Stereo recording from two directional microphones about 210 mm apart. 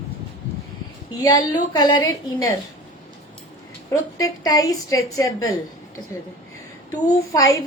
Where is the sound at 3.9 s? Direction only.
15° left (ahead or behind).